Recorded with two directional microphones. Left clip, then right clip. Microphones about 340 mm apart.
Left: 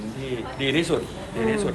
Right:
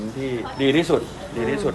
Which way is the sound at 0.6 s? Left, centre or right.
Right.